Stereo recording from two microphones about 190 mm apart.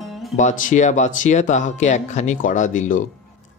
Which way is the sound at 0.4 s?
40° left (ahead or behind).